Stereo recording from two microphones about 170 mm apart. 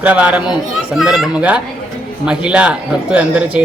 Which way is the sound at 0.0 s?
10° right (ahead or behind).